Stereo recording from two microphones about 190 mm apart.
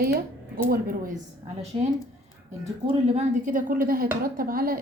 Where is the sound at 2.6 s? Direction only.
35° right (ahead or behind).